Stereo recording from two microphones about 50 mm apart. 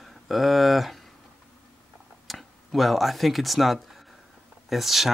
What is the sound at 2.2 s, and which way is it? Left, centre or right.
Speech, centre.